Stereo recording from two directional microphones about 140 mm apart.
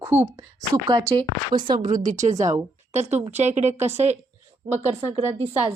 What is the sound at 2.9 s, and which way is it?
A woman's voice, 55° right (ahead or behind).